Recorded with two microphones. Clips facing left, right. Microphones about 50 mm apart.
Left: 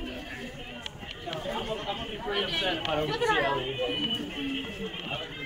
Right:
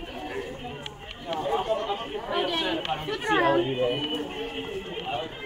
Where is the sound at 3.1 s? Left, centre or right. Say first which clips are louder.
Right 5 dB; right.